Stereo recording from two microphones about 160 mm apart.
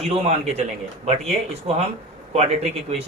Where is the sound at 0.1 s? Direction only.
40° right (ahead or behind).